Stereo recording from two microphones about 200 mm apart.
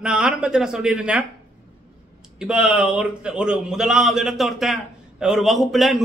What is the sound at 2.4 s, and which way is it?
A man's voice, 5° right (ahead or behind).